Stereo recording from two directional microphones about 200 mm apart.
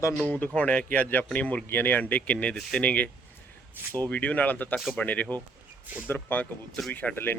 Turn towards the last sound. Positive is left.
turn(degrees=10)  # may be behind; listen again after turning